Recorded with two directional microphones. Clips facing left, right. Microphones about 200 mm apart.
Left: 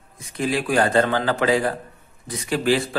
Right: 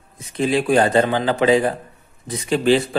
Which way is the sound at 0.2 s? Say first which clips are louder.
Right 4 dB; 25° right (ahead or behind).